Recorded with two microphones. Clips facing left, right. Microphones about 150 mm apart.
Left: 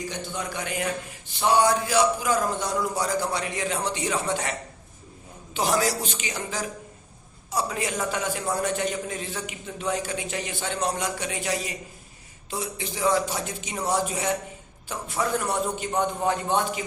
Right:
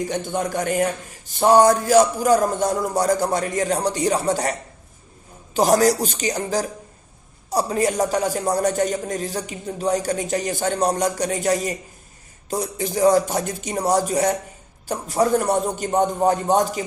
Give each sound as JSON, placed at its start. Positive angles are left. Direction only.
{"t": 0.0, "sound": "a man's voice", "side_deg": -50}
{"t": 5.5, "sound": "a man's voice", "side_deg": -40}